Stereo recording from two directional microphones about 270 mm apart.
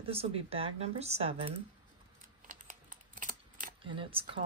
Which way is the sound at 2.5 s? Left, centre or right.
Right.